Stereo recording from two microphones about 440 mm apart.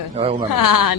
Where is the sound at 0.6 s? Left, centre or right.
Left.